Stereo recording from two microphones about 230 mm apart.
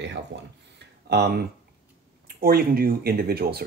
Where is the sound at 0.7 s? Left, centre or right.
Right.